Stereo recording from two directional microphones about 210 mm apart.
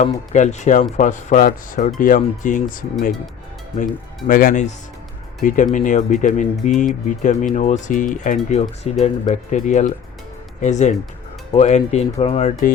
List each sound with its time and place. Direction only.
0.0 s speech: 35° left (ahead or behind)
4.3 s speech: 40° left (ahead or behind)